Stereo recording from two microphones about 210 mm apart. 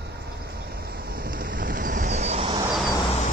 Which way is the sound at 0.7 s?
45° right (ahead or behind).